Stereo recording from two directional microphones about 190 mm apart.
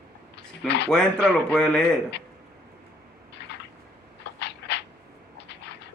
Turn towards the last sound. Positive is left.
turn(degrees=65)  # may be behind; listen again after turning